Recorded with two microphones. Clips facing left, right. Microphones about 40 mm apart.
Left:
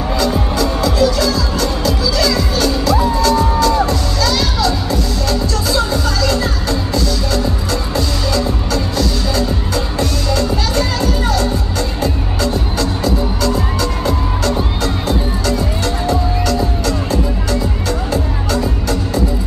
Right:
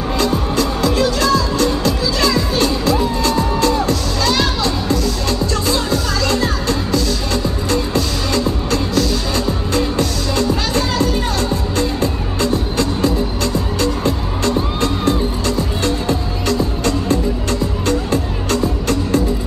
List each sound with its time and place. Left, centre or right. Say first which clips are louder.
0.2 s music: even; right
12.0 s music: even; right